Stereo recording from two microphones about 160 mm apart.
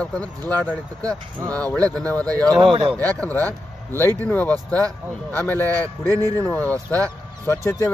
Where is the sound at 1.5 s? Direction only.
10° left (ahead or behind).